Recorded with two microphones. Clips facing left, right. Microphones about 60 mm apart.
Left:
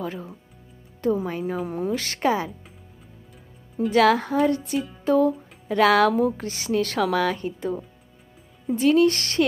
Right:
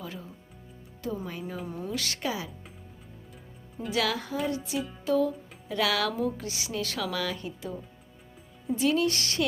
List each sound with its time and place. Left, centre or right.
0.0 s a woman's voice: left
2.1 s a woman's voice: left
3.9 s a woman's voice: left
5.0 s music: left
5.6 s a woman's voice: left